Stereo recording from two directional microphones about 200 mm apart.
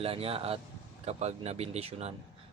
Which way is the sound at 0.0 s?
30° right (ahead or behind).